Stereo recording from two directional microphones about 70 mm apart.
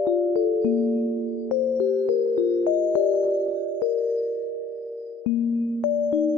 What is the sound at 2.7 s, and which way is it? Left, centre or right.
Music, left.